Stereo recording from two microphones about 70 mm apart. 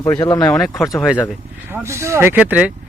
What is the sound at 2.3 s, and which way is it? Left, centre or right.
Speech, right.